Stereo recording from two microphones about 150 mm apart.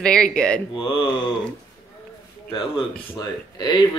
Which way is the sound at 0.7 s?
35° left (ahead or behind).